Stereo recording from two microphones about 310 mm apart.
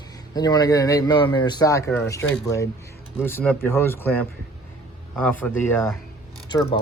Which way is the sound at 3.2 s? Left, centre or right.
Centre.